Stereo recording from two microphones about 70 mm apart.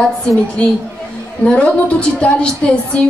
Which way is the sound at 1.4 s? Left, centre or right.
Centre.